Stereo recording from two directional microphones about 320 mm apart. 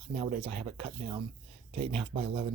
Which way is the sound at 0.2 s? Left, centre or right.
Centre.